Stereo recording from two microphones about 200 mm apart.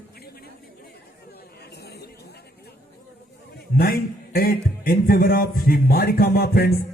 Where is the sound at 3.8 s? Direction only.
50° left (ahead or behind).